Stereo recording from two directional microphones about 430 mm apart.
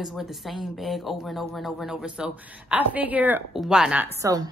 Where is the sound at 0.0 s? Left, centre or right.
Centre.